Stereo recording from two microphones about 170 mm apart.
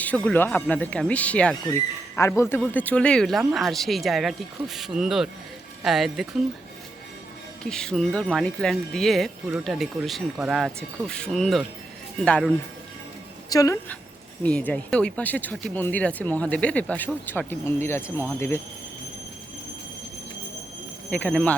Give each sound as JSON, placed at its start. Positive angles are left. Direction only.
{"t": 0.3, "sound": "speech", "side_deg": 10}
{"t": 7.6, "sound": "speech", "side_deg": 5}
{"t": 13.5, "sound": "a woman's voice", "side_deg": 20}
{"t": 14.4, "sound": "speech", "side_deg": 10}
{"t": 21.1, "sound": "speech", "side_deg": 5}